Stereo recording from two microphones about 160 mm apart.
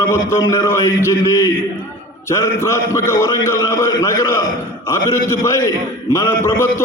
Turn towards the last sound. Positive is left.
turn(degrees=15)  # may be behind; listen again after turning